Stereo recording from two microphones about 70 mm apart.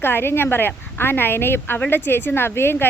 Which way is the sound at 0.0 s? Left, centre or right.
Left.